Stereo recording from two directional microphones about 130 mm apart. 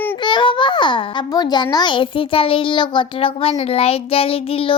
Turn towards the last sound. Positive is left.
turn(degrees=45)  # may be behind; listen again after turning